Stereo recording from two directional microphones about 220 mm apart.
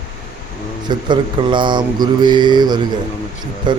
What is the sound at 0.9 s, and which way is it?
Mantra, 20° right (ahead or behind).